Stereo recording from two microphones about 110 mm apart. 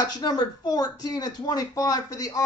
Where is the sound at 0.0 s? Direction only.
35° left (ahead or behind).